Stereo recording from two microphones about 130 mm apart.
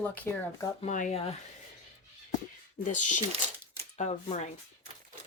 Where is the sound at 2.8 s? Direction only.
75° left (ahead or behind).